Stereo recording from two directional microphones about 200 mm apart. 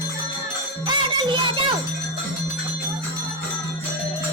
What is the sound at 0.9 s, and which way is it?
Music, 25° right (ahead or behind).